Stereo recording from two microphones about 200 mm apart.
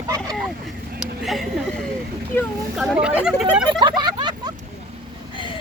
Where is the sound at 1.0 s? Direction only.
Centre (ahead or behind).